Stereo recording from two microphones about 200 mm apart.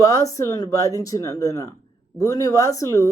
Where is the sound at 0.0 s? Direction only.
15° left (ahead or behind).